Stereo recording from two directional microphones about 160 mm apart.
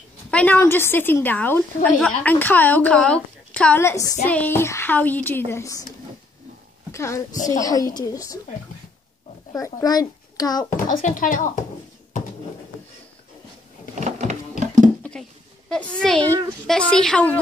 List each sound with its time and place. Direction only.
0.3 s a woman's voice: 10° left (ahead or behind)
9.5 s a child's voice: 20° left (ahead or behind)
10.9 s speech: 55° left (ahead or behind)
13.9 s a sound: 45° right (ahead or behind)
15.7 s a woman's voice: 5° left (ahead or behind)